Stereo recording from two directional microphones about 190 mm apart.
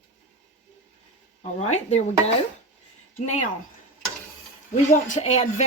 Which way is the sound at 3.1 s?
40° left (ahead or behind).